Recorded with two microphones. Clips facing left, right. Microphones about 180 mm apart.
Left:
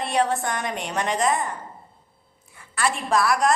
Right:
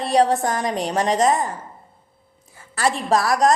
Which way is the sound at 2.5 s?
35° right (ahead or behind).